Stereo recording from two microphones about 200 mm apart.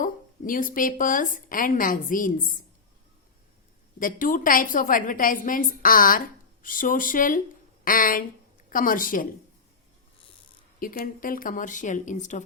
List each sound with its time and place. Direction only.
0.0 s a woman's voice: 45° left (ahead or behind)
4.0 s a woman's voice: 45° left (ahead or behind)
10.8 s speech: 45° left (ahead or behind)